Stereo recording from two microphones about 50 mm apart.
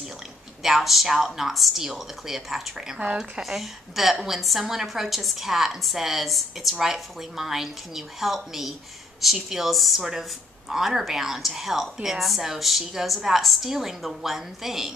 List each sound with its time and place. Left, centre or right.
0.6 s a woman's voice: centre